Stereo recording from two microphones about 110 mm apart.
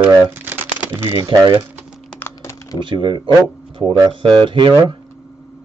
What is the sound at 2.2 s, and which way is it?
Typing, 25° left (ahead or behind).